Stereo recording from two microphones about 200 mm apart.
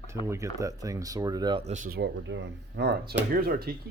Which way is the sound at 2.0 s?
65° right (ahead or behind).